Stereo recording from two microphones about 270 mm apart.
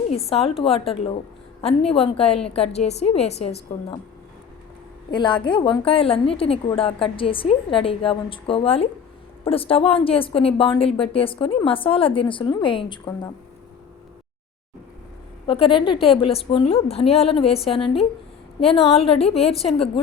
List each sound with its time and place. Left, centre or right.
0.1 s a woman's voice: left
5.1 s a woman's voice: centre
15.4 s a woman's voice: centre